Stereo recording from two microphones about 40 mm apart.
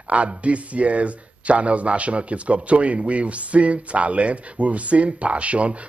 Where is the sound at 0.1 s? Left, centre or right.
Right.